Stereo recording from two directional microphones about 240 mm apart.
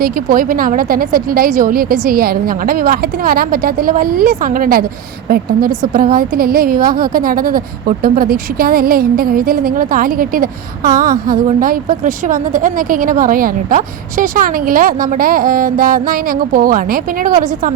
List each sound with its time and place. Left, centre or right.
0.0 s a woman's voice: right